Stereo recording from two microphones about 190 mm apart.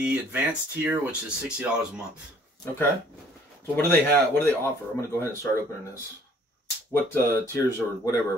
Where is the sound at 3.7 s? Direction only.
10° left (ahead or behind).